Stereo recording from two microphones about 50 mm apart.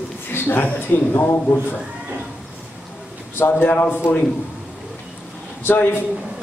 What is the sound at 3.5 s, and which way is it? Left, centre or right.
Speech, left.